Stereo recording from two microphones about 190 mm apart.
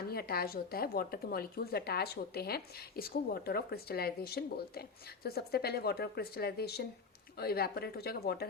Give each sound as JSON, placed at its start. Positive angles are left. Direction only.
{"t": 0.1, "sound": "a woman's voice", "side_deg": 55}